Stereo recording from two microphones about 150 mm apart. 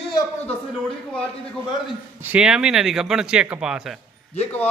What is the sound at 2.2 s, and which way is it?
A man's voice, 10° right (ahead or behind).